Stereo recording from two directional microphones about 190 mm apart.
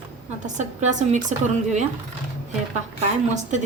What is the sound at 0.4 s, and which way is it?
A woman's voice, 40° right (ahead or behind).